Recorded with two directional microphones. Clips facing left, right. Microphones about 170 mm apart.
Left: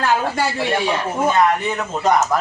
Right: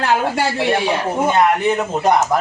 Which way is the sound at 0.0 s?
20° right (ahead or behind).